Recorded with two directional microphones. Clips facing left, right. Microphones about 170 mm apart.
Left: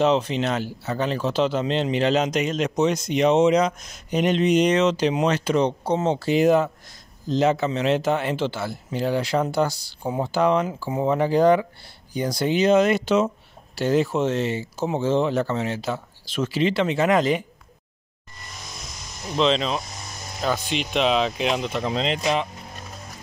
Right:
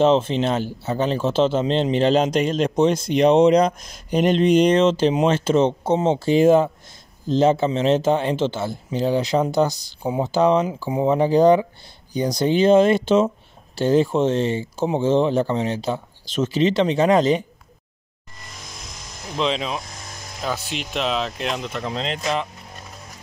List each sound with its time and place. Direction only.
0.0 s speech: 25° right (ahead or behind)
19.3 s speech: 10° right (ahead or behind)